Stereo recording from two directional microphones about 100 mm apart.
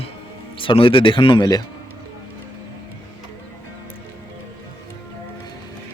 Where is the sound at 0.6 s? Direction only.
60° left (ahead or behind); by 1.6 s 40° left (ahead or behind).